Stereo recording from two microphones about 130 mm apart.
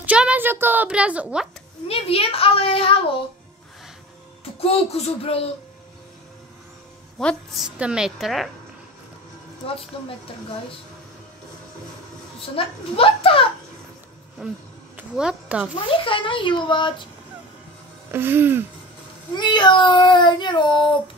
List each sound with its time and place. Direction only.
0.0 s a woman's voice: 10° right (ahead or behind)
1.9 s a child's voice: 50° left (ahead or behind)
4.6 s a child's voice: 50° left (ahead or behind)
7.2 s a woman's voice: centre (ahead or behind)
12.4 s a child's voice: 45° left (ahead or behind)
14.4 s a woman's voice: 5° right (ahead or behind)
16.0 s child singing: 40° left (ahead or behind)
18.1 s a woman's voice: 15° right (ahead or behind)
19.3 s child singing: 35° left (ahead or behind)